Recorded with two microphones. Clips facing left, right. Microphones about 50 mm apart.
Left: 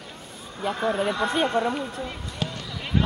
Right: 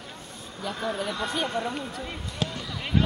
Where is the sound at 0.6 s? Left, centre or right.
Left.